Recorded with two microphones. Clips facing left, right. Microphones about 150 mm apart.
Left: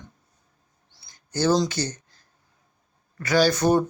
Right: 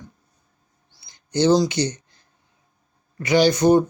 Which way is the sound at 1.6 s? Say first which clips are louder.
Right 4 dB; 15° right (ahead or behind).